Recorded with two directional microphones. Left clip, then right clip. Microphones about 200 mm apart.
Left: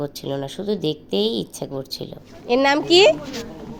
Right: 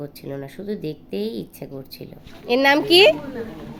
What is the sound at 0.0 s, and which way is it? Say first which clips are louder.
A woman's voice: left 6 dB; 10° left (ahead or behind).